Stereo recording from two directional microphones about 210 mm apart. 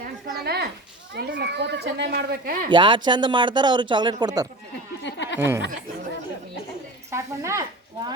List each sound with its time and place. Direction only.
0.0 s a sound: 50° right (ahead or behind)
1.1 s speech: 55° right (ahead or behind)
2.6 s speech: 20° right (ahead or behind)
5.0 s a sound: 60° left (ahead or behind)
5.4 s speech: 10° right (ahead or behind)
7.1 s speech: 15° right (ahead or behind)